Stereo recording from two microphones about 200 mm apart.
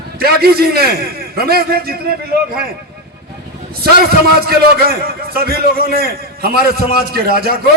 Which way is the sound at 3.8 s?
50° right (ahead or behind).